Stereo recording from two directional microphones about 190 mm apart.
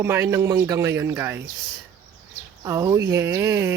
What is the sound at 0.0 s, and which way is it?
Speech, 15° right (ahead or behind).